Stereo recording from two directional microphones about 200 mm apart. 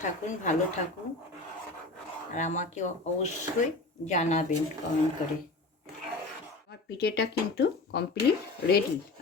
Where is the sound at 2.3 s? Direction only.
35° left (ahead or behind).